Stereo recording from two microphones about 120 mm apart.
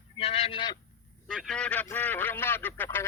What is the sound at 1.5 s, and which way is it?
Speech, 10° left (ahead or behind).